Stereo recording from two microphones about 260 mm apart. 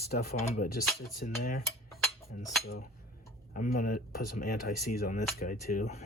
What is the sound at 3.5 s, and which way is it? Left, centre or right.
Speech, left.